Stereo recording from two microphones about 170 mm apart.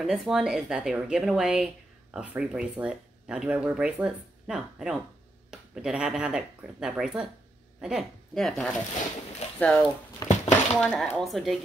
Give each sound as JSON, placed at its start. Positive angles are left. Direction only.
{"t": 0.0, "sound": "speech", "side_deg": 0}
{"t": 10.2, "sound": "dishes", "side_deg": 20}
{"t": 10.8, "sound": "speech", "side_deg": 5}